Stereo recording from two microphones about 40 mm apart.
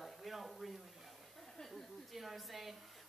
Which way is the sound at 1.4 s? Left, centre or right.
Centre.